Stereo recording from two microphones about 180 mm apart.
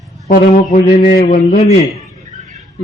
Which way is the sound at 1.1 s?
60° left (ahead or behind).